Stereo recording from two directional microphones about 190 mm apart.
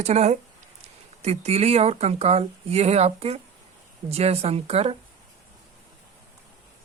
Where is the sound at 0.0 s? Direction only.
35° right (ahead or behind).